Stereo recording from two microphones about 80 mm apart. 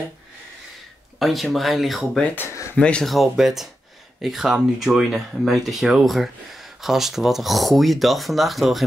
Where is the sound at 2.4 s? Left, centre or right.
Left.